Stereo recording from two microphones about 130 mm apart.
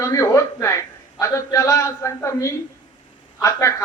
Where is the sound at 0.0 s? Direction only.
25° left (ahead or behind).